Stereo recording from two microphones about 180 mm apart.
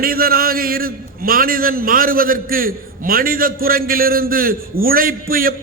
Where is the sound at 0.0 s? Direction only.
55° right (ahead or behind).